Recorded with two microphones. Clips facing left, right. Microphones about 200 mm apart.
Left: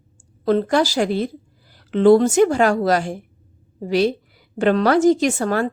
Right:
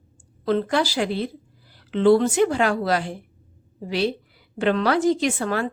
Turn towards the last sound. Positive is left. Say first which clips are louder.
# left 4 dB
turn(degrees=45)  # may be behind; listen again after turning